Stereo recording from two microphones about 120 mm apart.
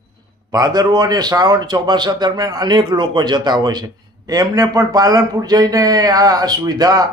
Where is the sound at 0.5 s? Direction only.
30° right (ahead or behind).